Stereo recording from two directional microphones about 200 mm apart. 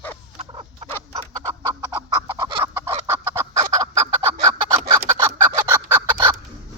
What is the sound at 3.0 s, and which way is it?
Fowl, 15° right (ahead or behind).